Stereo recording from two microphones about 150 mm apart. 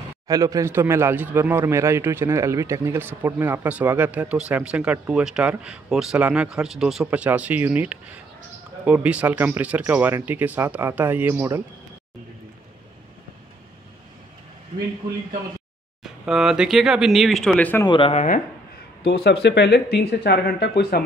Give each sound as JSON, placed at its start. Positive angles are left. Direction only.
{"t": 0.3, "sound": "speech", "side_deg": -25}
{"t": 16.0, "sound": "speech", "side_deg": -5}
{"t": 17.8, "sound": "speech", "side_deg": 35}
{"t": 18.1, "sound": "speech", "side_deg": 60}
{"t": 19.0, "sound": "speech", "side_deg": 90}